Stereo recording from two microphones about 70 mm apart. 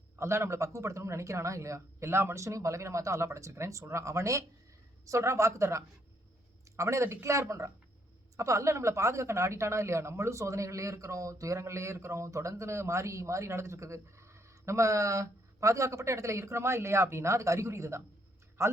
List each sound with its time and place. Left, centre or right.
0.2 s speech: right